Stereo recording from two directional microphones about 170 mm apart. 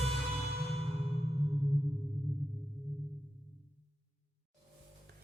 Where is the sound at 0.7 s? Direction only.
35° right (ahead or behind).